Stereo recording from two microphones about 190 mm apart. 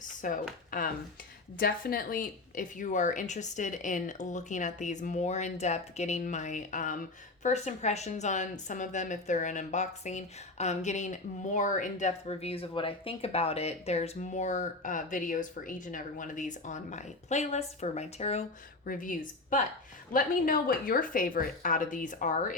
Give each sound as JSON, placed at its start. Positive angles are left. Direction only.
{"t": 0.2, "sound": "speech", "side_deg": 45}
{"t": 1.5, "sound": "a woman's voice", "side_deg": 50}